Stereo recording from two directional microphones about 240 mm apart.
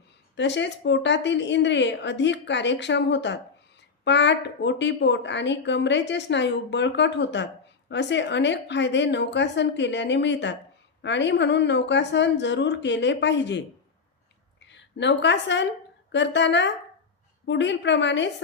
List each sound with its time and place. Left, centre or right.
0.3 s a woman's voice: left
14.6 s a woman's voice: left